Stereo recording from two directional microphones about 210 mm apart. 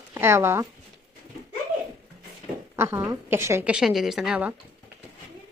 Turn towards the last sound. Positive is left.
turn(degrees=-5)  # may be behind; listen again after turning